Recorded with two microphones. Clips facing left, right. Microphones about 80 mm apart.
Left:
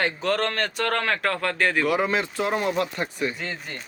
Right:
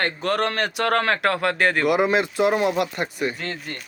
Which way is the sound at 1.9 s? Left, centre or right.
Centre.